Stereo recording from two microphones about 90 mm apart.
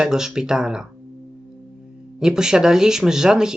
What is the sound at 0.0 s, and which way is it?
Speech, 5° right (ahead or behind).